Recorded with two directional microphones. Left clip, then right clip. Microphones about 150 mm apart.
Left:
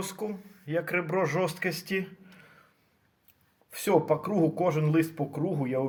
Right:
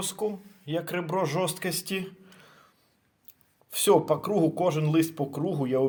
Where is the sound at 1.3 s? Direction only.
45° right (ahead or behind).